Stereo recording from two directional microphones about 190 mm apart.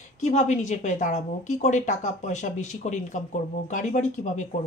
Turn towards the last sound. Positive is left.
turn(degrees=40)  # may be behind; listen again after turning